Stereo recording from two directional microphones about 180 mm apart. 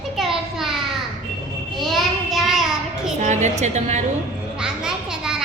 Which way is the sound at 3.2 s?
40° right (ahead or behind).